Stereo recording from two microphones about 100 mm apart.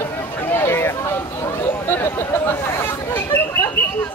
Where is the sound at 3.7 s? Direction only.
25° left (ahead or behind).